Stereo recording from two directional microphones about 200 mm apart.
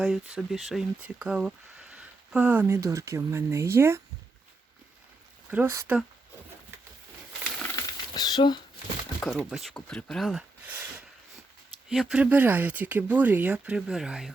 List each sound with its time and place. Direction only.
0.0 s speech: 5° right (ahead or behind)
5.5 s speech: 10° right (ahead or behind)
7.4 s a sound: 5° left (ahead or behind)
7.8 s a sound: 20° left (ahead or behind)
9.2 s speech: centre (ahead or behind)
11.9 s speech: 5° right (ahead or behind)